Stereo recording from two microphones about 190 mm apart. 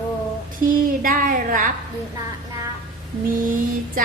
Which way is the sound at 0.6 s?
50° right (ahead or behind).